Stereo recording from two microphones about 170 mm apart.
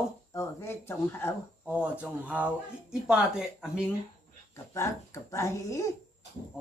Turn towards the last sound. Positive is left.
turn(degrees=15)  # may be behind; listen again after turning